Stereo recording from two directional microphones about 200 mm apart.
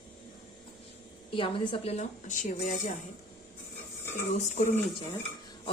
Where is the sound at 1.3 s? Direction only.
25° left (ahead or behind).